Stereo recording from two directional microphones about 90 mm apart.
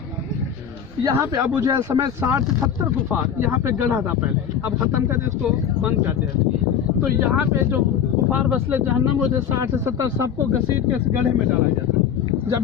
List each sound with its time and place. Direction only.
1.0 s speech: 40° right (ahead or behind)
2.2 s speech: 25° right (ahead or behind)